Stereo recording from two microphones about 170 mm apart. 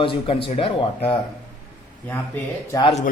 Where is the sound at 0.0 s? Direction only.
30° left (ahead or behind).